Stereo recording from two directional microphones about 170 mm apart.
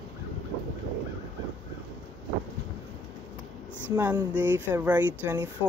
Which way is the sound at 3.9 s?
10° right (ahead or behind).